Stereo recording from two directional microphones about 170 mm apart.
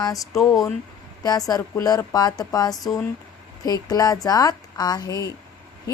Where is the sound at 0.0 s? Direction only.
20° left (ahead or behind).